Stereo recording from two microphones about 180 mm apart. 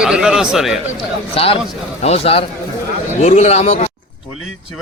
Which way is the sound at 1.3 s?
30° left (ahead or behind).